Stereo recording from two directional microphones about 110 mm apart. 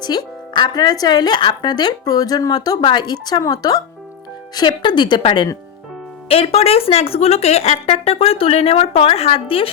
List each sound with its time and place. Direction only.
0.0 s speech: 40° left (ahead or behind)
6.2 s speech: 65° left (ahead or behind)